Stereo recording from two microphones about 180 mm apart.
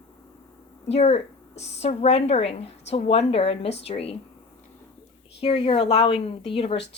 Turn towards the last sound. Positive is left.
turn(degrees=30)  # may be behind; listen again after turning